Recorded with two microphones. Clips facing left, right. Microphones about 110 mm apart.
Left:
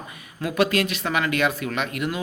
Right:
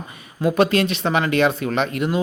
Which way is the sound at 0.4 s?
30° right (ahead or behind).